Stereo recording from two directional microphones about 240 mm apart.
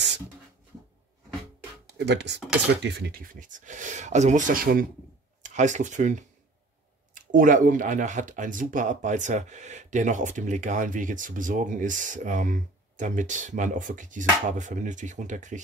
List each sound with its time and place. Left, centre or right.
2.0 s speech: right